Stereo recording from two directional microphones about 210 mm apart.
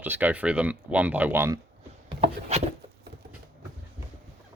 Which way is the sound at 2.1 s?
25° right (ahead or behind).